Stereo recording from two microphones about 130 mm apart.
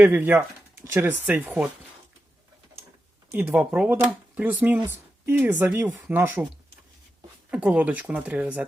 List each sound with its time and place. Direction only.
0.0 s speech: 15° right (ahead or behind)
3.3 s speech: 15° right (ahead or behind)
7.5 s speech: 10° right (ahead or behind)